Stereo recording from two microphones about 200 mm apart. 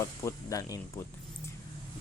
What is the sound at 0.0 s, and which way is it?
Speech, 15° left (ahead or behind).